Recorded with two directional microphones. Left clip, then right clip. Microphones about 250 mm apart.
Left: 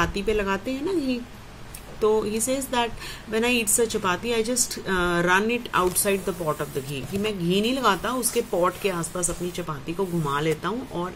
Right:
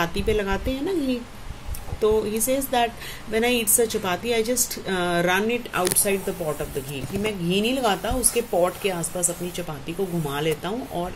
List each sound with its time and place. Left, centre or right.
0.0 s a woman's voice: centre